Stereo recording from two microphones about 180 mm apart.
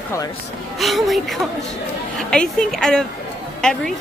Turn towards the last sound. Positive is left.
turn(degrees=5)  # may be behind; listen again after turning